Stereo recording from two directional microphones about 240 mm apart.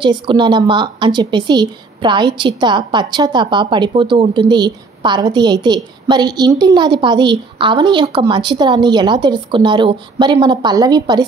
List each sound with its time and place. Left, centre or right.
0.0 s a woman's voice: centre